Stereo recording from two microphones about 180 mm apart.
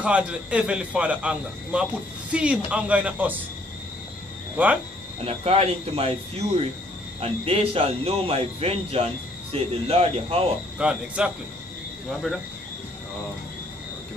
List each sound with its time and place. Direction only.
0.0 s a man's voice: 5° right (ahead or behind)
5.2 s speech: 30° right (ahead or behind)
10.8 s speech: 5° right (ahead or behind)